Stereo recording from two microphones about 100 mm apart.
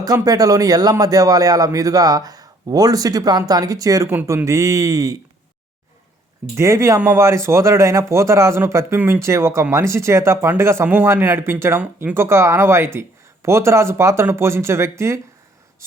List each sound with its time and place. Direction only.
0.0 s a man's voice: 40° right (ahead or behind)
6.6 s speech: 30° right (ahead or behind)